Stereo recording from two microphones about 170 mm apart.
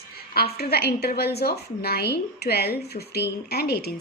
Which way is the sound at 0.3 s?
65° left (ahead or behind).